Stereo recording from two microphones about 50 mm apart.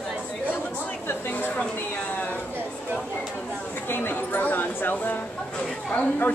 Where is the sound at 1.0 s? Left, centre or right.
Left.